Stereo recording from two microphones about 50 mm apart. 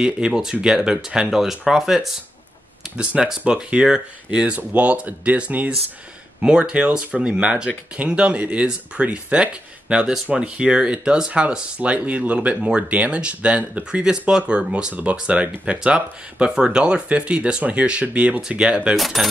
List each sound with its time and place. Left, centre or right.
0.0 s speech: centre
3.0 s speech: right
6.4 s speech: centre
18.9 s speech: centre